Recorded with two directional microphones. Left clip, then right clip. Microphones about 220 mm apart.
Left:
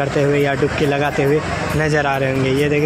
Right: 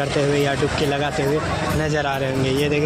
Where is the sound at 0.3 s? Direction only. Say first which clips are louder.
Left 3 dB; centre (ahead or behind).